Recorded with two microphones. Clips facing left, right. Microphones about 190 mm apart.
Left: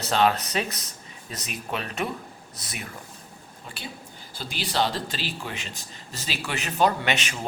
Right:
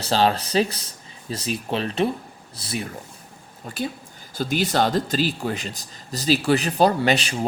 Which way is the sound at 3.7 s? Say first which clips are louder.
Right 11 dB; 45° right (ahead or behind).